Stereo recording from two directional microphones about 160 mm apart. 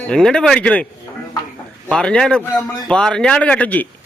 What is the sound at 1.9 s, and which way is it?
A man's voice, 5° left (ahead or behind).